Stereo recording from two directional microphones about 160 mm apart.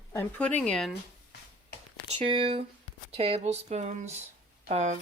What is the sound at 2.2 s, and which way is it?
Speech, 35° right (ahead or behind).